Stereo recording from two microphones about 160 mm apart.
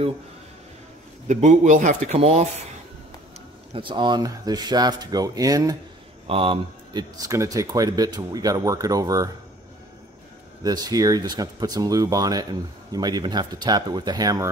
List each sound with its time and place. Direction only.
1.2 s speech: 50° right (ahead or behind)
3.7 s speech: 30° right (ahead or behind)
6.2 s speech: 35° right (ahead or behind)
10.6 s speech: 25° right (ahead or behind)